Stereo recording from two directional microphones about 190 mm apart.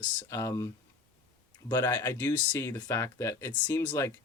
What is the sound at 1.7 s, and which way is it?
Speech, 10° left (ahead or behind).